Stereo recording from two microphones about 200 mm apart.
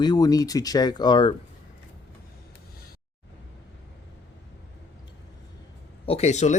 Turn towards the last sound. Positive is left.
turn(degrees=35)  # may be behind; listen again after turning